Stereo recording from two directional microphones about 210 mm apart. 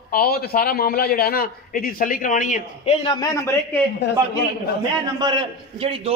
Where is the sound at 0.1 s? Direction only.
45° left (ahead or behind); by 3.3 s 25° left (ahead or behind).